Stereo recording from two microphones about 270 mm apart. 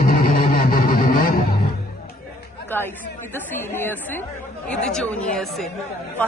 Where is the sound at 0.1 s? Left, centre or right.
Left.